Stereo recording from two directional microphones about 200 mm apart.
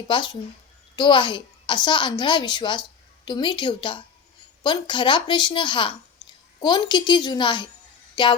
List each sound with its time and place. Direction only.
0.1 s a child's voice: 25° left (ahead or behind)